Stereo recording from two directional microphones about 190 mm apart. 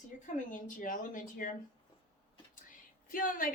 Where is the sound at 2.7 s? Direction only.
45° left (ahead or behind).